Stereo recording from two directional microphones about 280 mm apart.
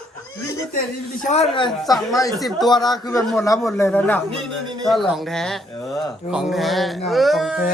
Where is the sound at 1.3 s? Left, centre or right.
Left.